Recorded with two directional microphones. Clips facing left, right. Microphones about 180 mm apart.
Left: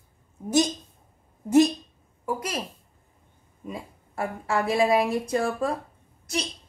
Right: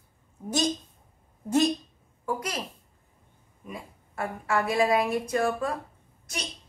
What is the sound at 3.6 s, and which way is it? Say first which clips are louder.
A woman's voice: left 4 dB; 25° left (ahead or behind).